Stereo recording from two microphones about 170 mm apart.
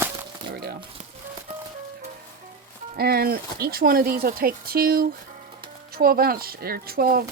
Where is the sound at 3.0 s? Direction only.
65° right (ahead or behind).